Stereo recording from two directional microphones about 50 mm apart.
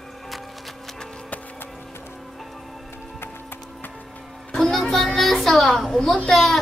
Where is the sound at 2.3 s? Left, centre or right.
Centre.